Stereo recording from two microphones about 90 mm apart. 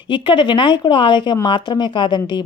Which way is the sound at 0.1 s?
60° left (ahead or behind).